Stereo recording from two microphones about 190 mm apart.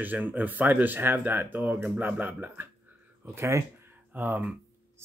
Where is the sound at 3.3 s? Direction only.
15° right (ahead or behind).